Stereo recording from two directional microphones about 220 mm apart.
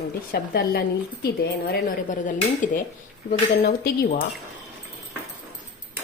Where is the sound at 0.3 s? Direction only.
45° left (ahead or behind).